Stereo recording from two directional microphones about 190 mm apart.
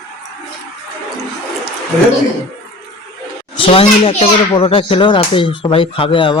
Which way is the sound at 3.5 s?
30° left (ahead or behind).